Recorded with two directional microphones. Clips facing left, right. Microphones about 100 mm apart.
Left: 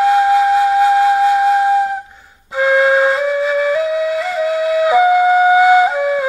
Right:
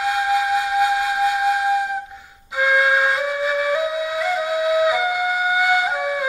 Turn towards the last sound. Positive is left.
turn(degrees=40)  # may be behind; listen again after turning